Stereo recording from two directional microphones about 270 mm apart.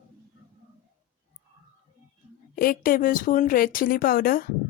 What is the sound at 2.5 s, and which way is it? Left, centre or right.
Speech, left.